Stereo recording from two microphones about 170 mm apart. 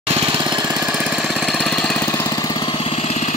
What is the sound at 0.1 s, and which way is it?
Jackhammer, 25° right (ahead or behind).